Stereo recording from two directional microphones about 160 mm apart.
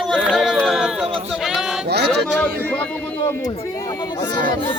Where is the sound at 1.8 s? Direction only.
90° right.